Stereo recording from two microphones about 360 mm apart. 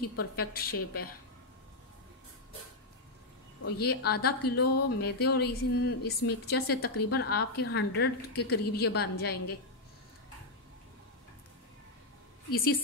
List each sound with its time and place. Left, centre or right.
0.2 s a woman's voice: left
3.7 s a woman's voice: left
12.4 s a woman's voice: left